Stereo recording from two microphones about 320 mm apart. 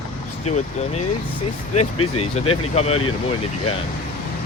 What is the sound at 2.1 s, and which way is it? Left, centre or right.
Speech, centre.